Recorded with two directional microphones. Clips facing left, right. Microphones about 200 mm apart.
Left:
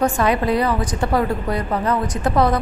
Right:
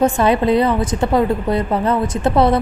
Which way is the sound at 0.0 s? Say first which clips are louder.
Right 4 dB; 25° right (ahead or behind).